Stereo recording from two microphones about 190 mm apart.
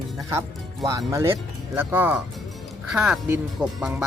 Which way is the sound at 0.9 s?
15° right (ahead or behind).